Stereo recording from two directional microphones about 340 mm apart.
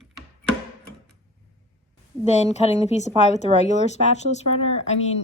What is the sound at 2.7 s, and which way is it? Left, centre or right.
Speech, centre.